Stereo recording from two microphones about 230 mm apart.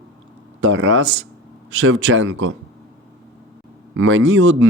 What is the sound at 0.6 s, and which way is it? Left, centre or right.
Speech, right.